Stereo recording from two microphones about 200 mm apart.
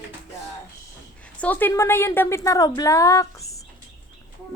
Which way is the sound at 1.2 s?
5° left (ahead or behind).